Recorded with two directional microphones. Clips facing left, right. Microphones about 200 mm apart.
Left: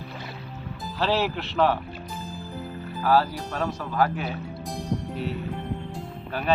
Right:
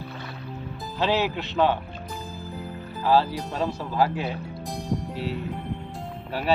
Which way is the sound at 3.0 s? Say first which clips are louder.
Right 1 dB; 25° right (ahead or behind).